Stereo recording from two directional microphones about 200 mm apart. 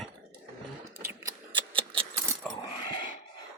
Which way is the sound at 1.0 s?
20° right (ahead or behind).